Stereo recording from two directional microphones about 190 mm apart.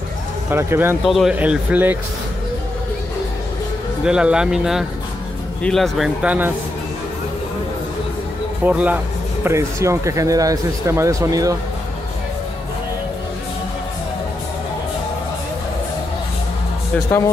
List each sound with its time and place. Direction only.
0.5 s speech: 10° right (ahead or behind)
1.0 s speech: centre (ahead or behind)
4.0 s speech: 5° right (ahead or behind)
8.6 s speech: 10° right (ahead or behind)